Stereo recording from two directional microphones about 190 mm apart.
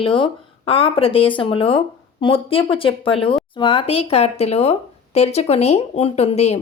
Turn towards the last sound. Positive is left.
turn(degrees=35)  # may be behind; listen again after turning